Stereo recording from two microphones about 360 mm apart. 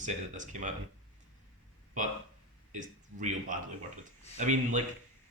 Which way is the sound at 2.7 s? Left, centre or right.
Centre.